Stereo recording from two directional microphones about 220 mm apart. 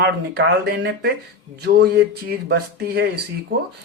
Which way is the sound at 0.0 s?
45° right (ahead or behind).